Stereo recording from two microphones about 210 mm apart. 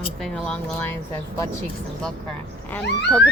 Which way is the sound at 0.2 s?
5° left (ahead or behind).